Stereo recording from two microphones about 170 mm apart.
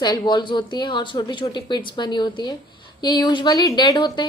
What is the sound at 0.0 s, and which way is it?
A woman's voice, 25° left (ahead or behind).